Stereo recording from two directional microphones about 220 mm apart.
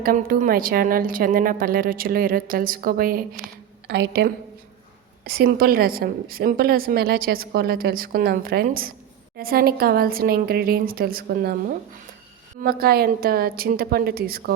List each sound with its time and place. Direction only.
0.0 s a woman's voice: 40° right (ahead or behind)
12.6 s a woman's voice: 45° right (ahead or behind)